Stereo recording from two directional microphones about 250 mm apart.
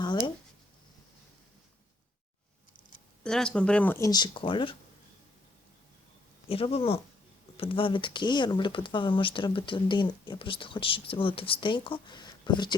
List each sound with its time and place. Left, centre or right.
0.0 s a sound: centre
3.2 s speech: centre; by 4.8 s left
6.5 s speech: left